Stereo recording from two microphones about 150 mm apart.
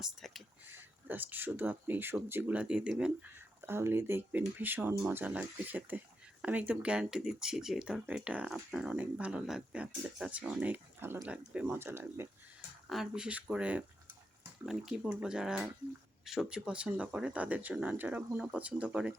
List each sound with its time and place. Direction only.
0.0 s speech: centre (ahead or behind)
0.7 s speech: 15° right (ahead or behind)
12.9 s speech: 5° right (ahead or behind)